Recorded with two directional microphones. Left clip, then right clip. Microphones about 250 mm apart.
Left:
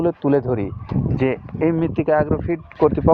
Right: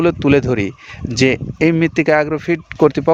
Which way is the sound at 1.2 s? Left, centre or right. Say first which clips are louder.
Right 7 dB; right.